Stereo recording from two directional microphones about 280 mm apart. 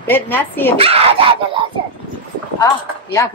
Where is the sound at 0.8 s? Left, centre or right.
Right.